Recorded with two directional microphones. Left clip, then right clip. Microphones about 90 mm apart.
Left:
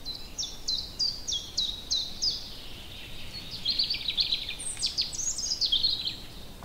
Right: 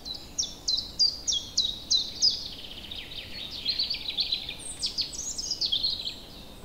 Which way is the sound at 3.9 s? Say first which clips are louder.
Left 1 dB; 10° left (ahead or behind).